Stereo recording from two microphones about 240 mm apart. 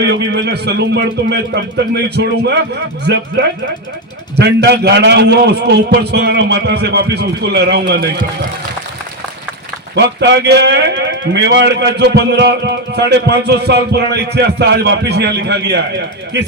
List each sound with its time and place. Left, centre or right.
0.0 s a man's voice: right
9.9 s a man's voice: right